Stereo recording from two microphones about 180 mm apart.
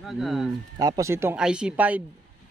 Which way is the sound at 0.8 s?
20° right (ahead or behind).